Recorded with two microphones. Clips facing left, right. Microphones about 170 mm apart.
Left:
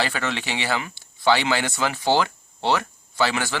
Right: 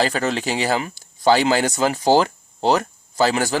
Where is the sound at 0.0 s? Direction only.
40° right (ahead or behind).